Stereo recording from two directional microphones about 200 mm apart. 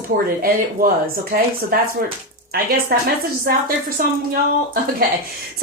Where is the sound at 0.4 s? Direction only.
45° right (ahead or behind).